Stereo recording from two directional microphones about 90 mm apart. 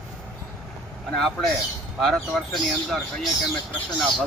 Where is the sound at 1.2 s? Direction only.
5° left (ahead or behind).